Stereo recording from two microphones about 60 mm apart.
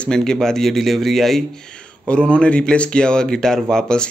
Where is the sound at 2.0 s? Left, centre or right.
Centre.